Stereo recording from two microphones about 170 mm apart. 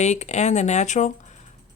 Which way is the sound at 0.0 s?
40° left (ahead or behind).